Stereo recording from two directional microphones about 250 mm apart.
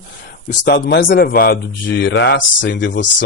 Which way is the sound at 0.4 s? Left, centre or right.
Left.